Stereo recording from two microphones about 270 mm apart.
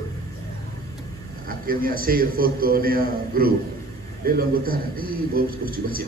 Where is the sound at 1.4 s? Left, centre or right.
Right.